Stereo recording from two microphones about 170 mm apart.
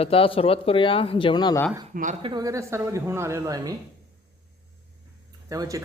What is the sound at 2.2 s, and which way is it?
Speech, 20° right (ahead or behind).